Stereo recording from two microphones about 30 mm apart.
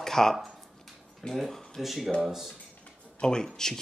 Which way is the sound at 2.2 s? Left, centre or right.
Centre.